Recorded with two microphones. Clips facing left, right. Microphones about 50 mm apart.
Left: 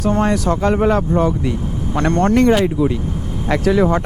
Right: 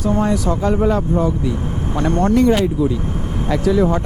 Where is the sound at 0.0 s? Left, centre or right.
Left.